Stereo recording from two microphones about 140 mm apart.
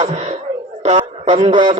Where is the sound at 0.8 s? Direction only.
60° right (ahead or behind).